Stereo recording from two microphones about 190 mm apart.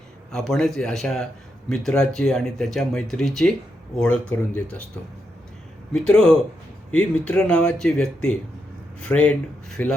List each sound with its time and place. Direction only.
0.3 s speech: centre (ahead or behind)
5.9 s speech: 5° left (ahead or behind)